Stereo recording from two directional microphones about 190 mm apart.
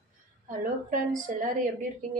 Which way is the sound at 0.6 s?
45° right (ahead or behind).